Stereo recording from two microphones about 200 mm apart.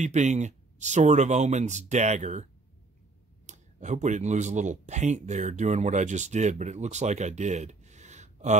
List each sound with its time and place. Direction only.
0.0 s speech: 35° right (ahead or behind)
3.4 s speech: 35° right (ahead or behind)